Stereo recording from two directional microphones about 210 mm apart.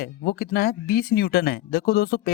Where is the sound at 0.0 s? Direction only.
50° left (ahead or behind).